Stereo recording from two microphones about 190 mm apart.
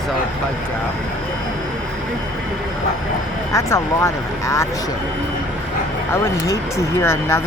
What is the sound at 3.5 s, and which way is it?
Speech, 15° left (ahead or behind).